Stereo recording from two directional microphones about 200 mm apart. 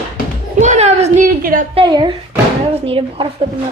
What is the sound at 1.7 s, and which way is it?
Speech, 25° right (ahead or behind).